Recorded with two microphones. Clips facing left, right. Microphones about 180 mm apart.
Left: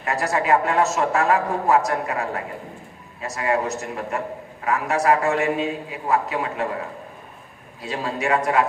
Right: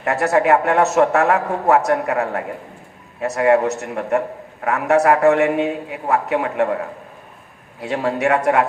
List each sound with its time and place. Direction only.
0.0 s a man's voice: 65° right (ahead or behind)
7.8 s a man's voice: 65° right (ahead or behind)